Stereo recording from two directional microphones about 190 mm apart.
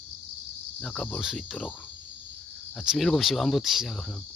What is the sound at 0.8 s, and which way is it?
Speech, 5° left (ahead or behind).